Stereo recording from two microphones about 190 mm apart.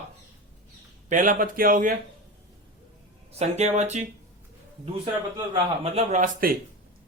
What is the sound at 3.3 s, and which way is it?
Speech, 35° right (ahead or behind).